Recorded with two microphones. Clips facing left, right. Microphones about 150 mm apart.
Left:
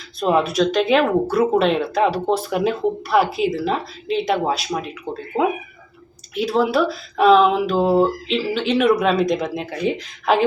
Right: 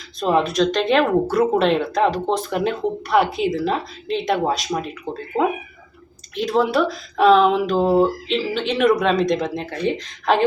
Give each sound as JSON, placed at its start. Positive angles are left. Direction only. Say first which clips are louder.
{"t": 0.2, "sound": "speech", "louder": "even", "side_deg": 5}